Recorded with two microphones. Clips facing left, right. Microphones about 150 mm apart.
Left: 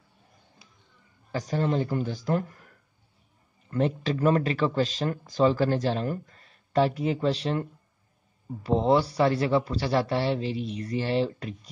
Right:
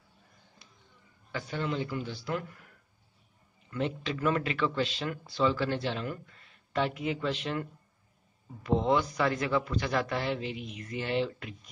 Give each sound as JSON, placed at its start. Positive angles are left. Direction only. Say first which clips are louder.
{"t": 1.3, "sound": "speech", "louder": "left 6 dB", "side_deg": 40}
{"t": 3.7, "sound": "speech", "louder": "left 6 dB", "side_deg": 40}
{"t": 8.6, "sound": "speech", "louder": "left 4 dB", "side_deg": 35}